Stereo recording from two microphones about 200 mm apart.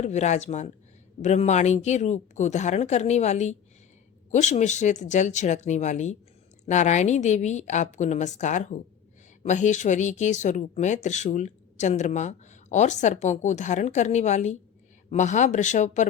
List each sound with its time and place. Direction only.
0.0 s speech: 35° left (ahead or behind)